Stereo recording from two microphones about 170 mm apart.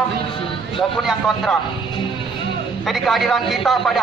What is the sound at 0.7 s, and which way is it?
Speech, centre (ahead or behind).